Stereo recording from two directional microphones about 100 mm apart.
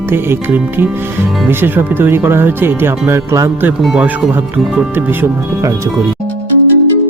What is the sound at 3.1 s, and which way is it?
Music, 35° right (ahead or behind).